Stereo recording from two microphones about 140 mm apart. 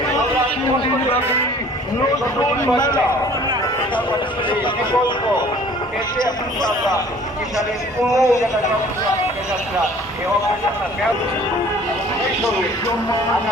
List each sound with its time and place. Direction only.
2.6 s speech: 30° left (ahead or behind)
4.4 s speech: 35° left (ahead or behind)
8.1 s speech: 20° left (ahead or behind)